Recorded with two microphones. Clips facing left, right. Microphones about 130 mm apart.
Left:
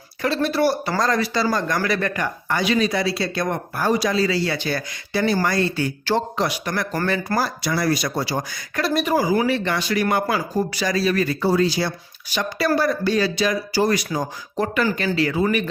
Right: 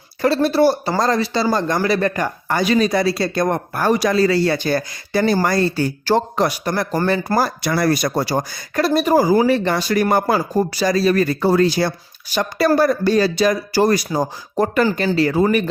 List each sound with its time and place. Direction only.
0.4 s speech: 30° right (ahead or behind)
3.8 s speech: 55° right (ahead or behind); by 15.6 s 40° right (ahead or behind)